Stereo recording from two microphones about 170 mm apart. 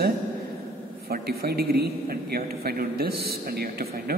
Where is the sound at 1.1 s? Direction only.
65° right (ahead or behind).